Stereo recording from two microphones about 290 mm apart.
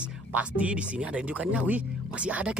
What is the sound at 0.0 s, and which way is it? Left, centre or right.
Speech, centre.